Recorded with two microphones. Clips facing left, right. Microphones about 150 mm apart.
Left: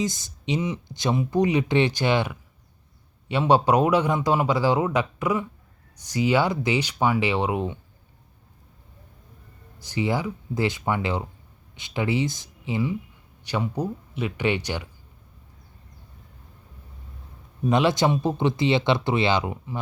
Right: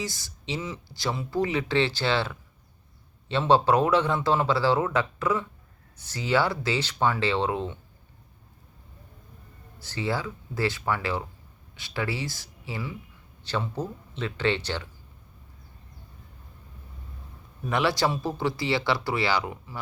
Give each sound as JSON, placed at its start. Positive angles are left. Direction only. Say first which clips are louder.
{"t": 0.0, "sound": "a man's voice", "louder": "left 7 dB", "side_deg": 20}
{"t": 9.7, "sound": "a man's voice", "louder": "left 4 dB", "side_deg": 15}
{"t": 17.7, "sound": "speech", "louder": "left 4 dB", "side_deg": 20}